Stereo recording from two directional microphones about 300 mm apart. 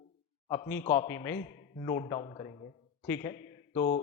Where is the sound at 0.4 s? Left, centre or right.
Centre.